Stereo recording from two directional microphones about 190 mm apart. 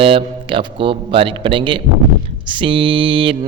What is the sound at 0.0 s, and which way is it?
Mantra, 30° right (ahead or behind).